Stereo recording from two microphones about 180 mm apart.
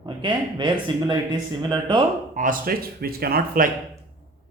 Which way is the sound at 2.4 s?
50° right (ahead or behind).